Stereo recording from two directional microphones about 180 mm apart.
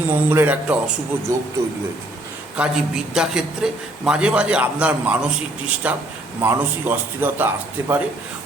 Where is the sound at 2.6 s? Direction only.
5° right (ahead or behind).